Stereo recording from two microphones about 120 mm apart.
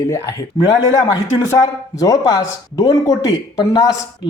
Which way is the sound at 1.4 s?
30° left (ahead or behind).